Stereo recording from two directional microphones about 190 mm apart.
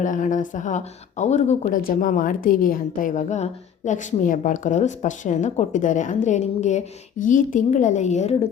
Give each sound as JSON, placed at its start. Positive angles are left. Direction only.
{"t": 0.0, "sound": "a woman's voice", "side_deg": 40}